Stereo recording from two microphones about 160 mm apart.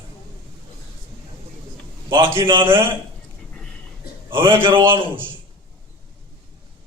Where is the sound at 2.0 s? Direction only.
30° right (ahead or behind).